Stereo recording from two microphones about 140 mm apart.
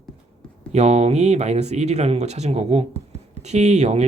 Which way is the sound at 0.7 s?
50° right (ahead or behind).